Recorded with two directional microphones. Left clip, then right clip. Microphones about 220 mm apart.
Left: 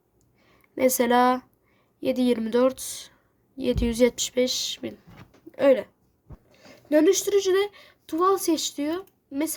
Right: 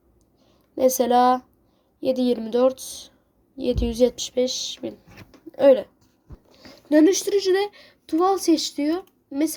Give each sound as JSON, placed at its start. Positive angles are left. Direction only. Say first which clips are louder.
{"t": 0.8, "sound": "a woman's voice", "louder": "right 3 dB", "side_deg": 15}